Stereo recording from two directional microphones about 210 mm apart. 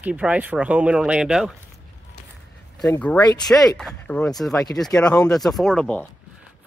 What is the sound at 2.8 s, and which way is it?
Speech, 5° left (ahead or behind).